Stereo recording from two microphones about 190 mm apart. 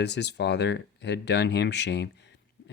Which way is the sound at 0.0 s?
65° left (ahead or behind).